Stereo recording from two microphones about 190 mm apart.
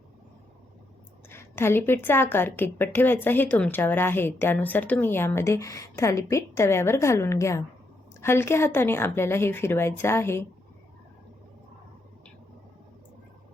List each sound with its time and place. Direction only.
1.3 s a woman's voice: 15° left (ahead or behind)